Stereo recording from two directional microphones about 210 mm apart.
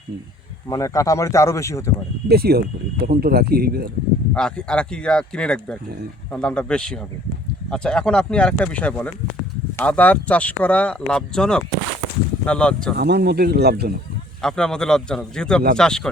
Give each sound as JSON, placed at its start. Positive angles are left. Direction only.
{"t": 0.7, "sound": "speech", "side_deg": 15}
{"t": 2.2, "sound": "speech", "side_deg": -50}
{"t": 4.4, "sound": "speech", "side_deg": 5}
{"t": 13.0, "sound": "speech", "side_deg": -50}
{"t": 14.4, "sound": "speech", "side_deg": 5}